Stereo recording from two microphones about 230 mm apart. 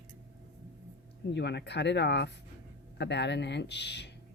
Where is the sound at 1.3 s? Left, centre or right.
Left.